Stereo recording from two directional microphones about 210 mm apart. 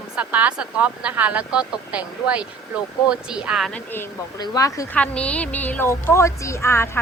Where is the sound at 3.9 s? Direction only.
15° left (ahead or behind).